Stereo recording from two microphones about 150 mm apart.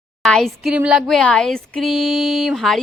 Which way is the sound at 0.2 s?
5° left (ahead or behind).